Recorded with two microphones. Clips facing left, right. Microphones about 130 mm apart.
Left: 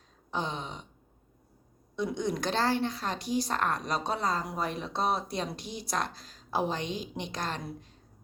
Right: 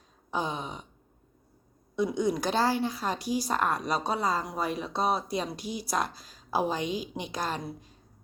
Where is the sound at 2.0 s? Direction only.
5° right (ahead or behind).